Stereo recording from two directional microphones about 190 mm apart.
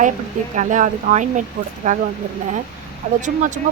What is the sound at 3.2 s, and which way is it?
Speech, 40° right (ahead or behind).